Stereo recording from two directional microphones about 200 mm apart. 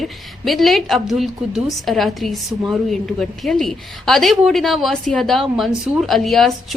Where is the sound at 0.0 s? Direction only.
Centre (ahead or behind).